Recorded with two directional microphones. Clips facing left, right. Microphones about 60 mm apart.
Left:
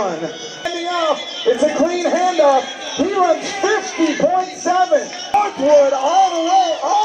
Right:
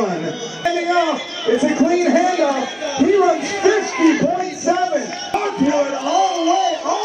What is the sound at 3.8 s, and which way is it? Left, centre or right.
Music, right.